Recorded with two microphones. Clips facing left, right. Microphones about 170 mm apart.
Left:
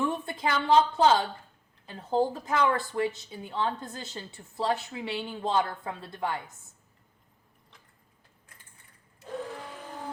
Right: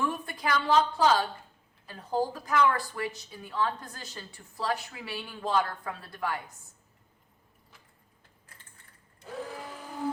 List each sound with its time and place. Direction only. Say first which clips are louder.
0.0 s a woman's voice: left 2 dB; 25° left (ahead or behind)
9.4 s blender: left 1 dB; 5° right (ahead or behind)